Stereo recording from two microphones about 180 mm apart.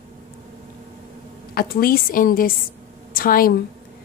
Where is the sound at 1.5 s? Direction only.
60° left (ahead or behind).